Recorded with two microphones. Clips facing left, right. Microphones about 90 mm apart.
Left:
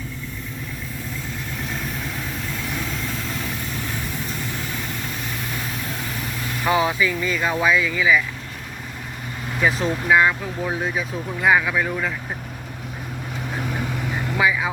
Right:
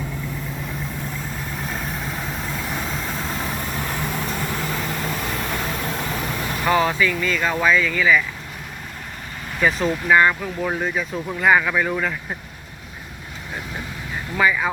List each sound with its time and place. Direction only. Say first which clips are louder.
2.7 s vehicle: right 1 dB; 35° right (ahead or behind)
6.7 s speech: right 1 dB; 10° left (ahead or behind)
9.6 s speech: right 1 dB; centre (ahead or behind)
14.3 s speech: right 2 dB; 5° left (ahead or behind)